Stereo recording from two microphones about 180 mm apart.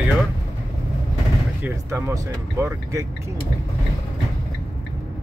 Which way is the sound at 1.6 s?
15° right (ahead or behind).